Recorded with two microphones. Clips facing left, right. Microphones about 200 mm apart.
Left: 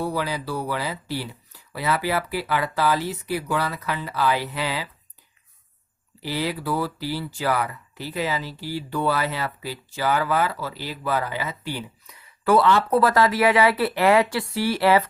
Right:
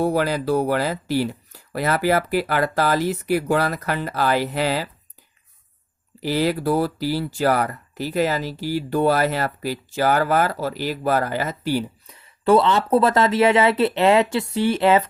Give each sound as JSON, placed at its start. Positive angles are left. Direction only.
{"t": 0.0, "sound": "speech", "side_deg": -50}
{"t": 6.2, "sound": "speech", "side_deg": -45}